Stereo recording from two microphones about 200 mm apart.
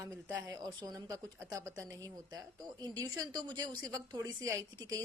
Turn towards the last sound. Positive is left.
turn(degrees=-15)  # may be behind; listen again after turning